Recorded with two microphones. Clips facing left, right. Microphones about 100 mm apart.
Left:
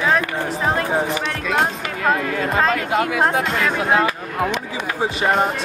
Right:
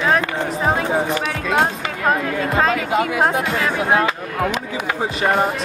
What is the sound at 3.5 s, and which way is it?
Speech, 15° right (ahead or behind).